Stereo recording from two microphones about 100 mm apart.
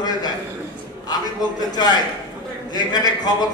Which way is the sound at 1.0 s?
45° left (ahead or behind).